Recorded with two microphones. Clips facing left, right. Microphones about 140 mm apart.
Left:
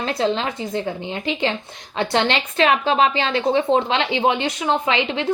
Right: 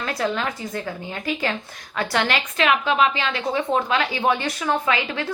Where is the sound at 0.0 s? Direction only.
25° left (ahead or behind).